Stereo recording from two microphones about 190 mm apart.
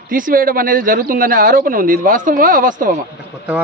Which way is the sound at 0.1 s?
45° right (ahead or behind).